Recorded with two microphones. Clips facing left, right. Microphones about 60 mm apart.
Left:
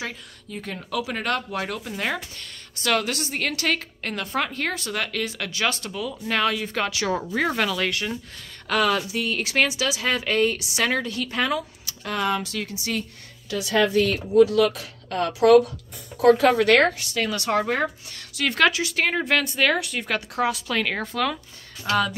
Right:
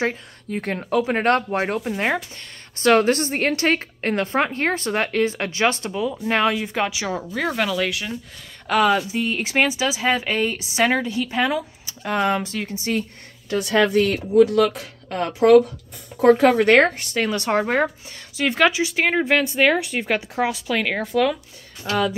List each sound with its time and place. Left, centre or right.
0.0 s a woman's voice: right
0.8 s a woman's voice: right; by 7.1 s centre
7.2 s speech: centre
8.6 s speech: centre
13.5 s speech: right
15.0 s a woman's voice: right
18.4 s speech: centre